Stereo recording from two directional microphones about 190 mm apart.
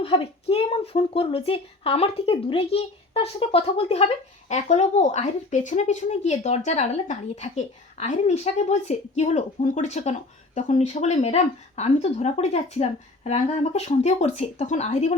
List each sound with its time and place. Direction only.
0.0 s a woman's voice: 30° left (ahead or behind)